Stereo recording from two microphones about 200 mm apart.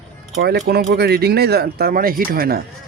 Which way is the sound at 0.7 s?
55° right (ahead or behind).